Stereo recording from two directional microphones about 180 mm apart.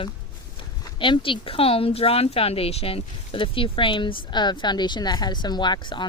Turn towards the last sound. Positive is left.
turn(degrees=25)  # may be behind; listen again after turning